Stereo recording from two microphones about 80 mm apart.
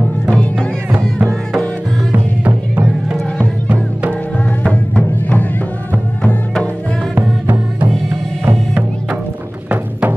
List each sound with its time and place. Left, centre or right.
0.3 s music: centre
2.1 s music: centre
4.6 s music: centre
7.2 s music: right
9.7 s music: right